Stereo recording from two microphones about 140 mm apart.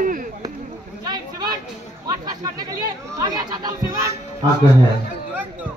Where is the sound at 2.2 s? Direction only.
25° right (ahead or behind).